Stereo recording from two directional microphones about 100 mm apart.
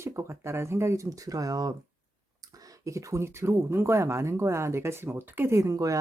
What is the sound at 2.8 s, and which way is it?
Speech, 30° right (ahead or behind).